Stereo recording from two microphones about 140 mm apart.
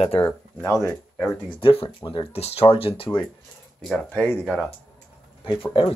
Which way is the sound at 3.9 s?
5° left (ahead or behind).